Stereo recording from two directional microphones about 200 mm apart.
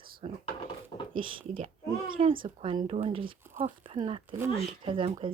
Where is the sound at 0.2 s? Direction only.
30° right (ahead or behind).